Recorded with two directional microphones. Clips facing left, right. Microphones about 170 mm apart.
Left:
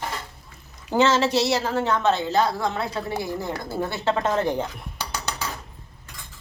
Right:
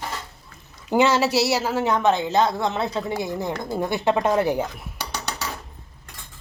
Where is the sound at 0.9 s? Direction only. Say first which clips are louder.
Right 1 dB; 15° right (ahead or behind).